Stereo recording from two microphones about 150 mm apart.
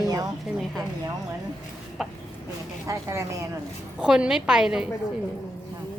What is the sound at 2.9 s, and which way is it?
Speech, 20° right (ahead or behind).